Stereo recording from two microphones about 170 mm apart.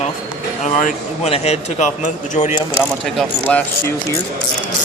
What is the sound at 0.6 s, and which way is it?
Speech, 45° left (ahead or behind).